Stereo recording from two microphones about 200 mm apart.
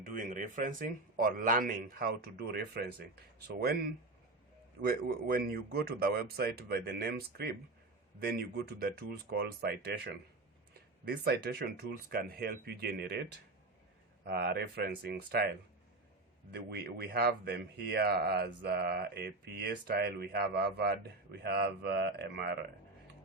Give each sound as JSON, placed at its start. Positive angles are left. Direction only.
{"t": 0.0, "sound": "speech", "side_deg": -45}
{"t": 16.5, "sound": "speech", "side_deg": -55}